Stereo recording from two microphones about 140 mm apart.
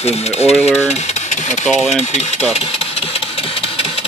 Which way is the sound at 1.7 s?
Centre (ahead or behind).